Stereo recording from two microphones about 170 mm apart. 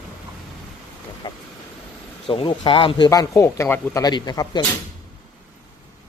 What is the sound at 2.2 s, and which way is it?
Speech, 30° left (ahead or behind).